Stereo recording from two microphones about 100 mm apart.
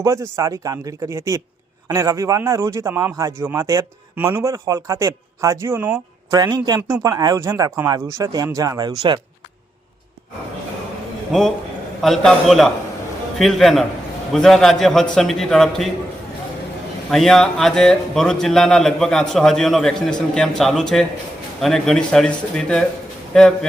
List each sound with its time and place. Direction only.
0.0 s speech: 30° right (ahead or behind)
6.3 s speech: 40° right (ahead or behind)
12.0 s speech: centre (ahead or behind)
17.1 s speech: 5° left (ahead or behind)